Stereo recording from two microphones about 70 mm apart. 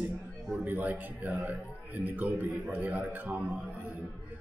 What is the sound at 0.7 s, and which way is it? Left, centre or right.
Speech, right.